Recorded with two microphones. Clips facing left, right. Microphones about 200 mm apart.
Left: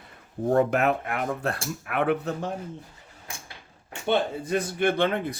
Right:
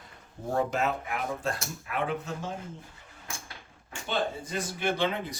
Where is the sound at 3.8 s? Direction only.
60° left (ahead or behind).